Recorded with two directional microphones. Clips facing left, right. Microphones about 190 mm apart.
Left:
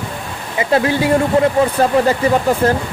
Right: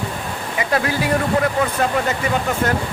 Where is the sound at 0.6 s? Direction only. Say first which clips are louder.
Left 6 dB; 25° left (ahead or behind).